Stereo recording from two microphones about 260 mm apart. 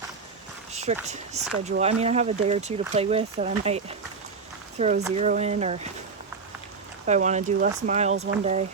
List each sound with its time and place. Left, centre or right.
0.7 s a sound: right
1.0 s speech: right
7.0 s speech: right